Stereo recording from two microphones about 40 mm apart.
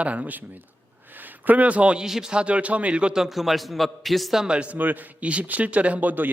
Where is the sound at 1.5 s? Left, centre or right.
Right.